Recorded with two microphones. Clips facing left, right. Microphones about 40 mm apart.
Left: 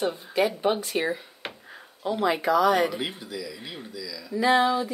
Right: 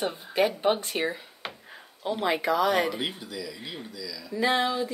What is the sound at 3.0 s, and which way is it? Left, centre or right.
Speech, centre.